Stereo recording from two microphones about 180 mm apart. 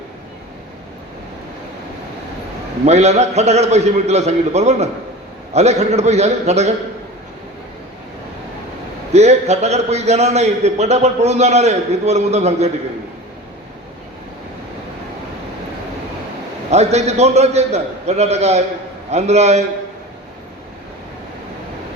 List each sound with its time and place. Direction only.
2.8 s a man's voice: 35° right (ahead or behind)
9.1 s a man's voice: 35° right (ahead or behind)
16.7 s a man's voice: 35° right (ahead or behind)